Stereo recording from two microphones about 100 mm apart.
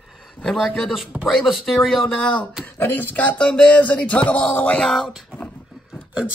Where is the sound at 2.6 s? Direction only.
20° left (ahead or behind); by 5.4 s centre (ahead or behind).